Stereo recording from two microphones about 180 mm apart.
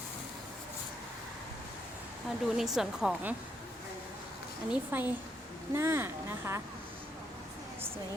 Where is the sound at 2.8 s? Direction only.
5° right (ahead or behind).